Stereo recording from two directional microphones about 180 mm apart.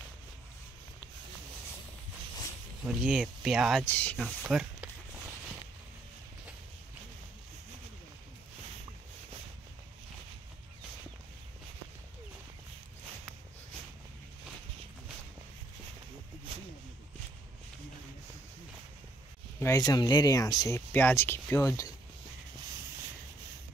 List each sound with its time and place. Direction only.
2.8 s speech: 5° right (ahead or behind)
3.8 s speech: 10° left (ahead or behind)
4.4 s speech: 5° right (ahead or behind)
19.6 s speech: 20° left (ahead or behind)